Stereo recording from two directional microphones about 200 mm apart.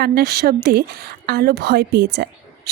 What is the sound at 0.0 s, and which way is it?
A woman's voice, 50° right (ahead or behind).